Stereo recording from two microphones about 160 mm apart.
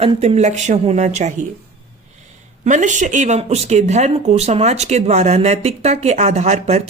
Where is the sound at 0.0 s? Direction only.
40° right (ahead or behind).